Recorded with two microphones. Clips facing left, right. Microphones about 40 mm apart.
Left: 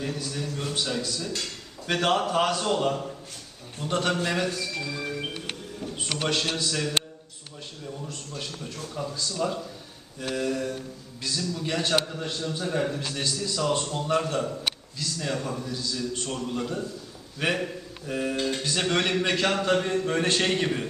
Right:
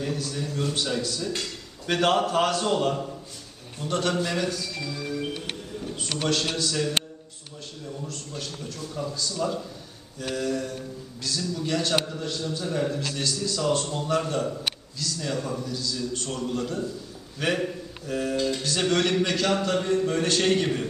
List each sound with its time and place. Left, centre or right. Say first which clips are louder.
0.0 s a man's voice: right 2 dB; centre
3.8 s a man's voice: even; centre
4.3 s music: left 1 dB; centre
6.1 s a man's voice: right 1 dB; centre
9.0 s a man's voice: even; centre
15.4 s a man's voice: right 2 dB; centre
15.6 s a man's voice: right 1 dB; centre
18.3 s a man's voice: right 1 dB; left